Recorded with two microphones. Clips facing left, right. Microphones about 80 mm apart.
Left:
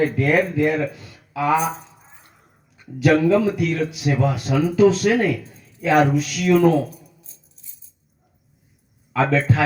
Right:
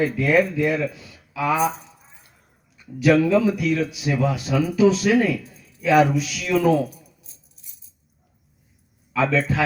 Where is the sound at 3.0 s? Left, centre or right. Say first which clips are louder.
Left 1 dB; left.